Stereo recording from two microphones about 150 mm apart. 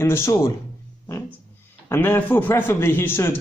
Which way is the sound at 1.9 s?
15° left (ahead or behind).